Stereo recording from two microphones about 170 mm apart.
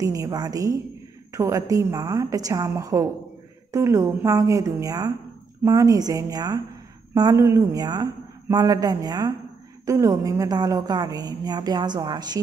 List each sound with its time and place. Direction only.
0.0 s a woman's voice: 20° right (ahead or behind)